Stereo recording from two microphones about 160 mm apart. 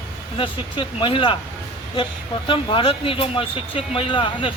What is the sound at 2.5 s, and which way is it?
Speech, 30° left (ahead or behind).